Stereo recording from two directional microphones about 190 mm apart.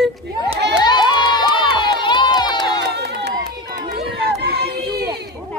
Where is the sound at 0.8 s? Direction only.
20° left (ahead or behind).